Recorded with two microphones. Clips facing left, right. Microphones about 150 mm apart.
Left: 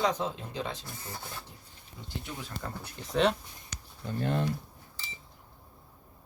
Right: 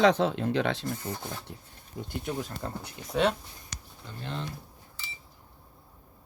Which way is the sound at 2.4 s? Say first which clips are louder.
Right 4 dB; 35° right (ahead or behind).